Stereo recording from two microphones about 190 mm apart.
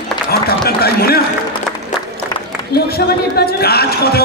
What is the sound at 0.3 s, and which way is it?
Run, 55° left (ahead or behind).